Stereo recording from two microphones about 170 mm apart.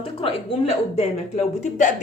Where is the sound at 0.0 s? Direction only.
35° left (ahead or behind).